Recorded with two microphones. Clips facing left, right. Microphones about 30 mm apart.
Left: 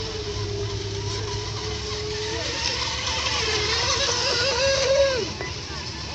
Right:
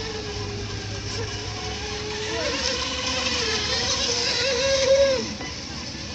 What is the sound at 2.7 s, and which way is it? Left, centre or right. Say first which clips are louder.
Vehicle: even; left.